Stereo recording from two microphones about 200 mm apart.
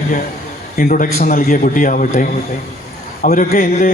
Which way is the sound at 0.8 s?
45° left (ahead or behind).